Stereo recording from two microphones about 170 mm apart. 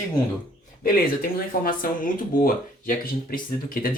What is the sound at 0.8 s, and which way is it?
Speech, 55° left (ahead or behind).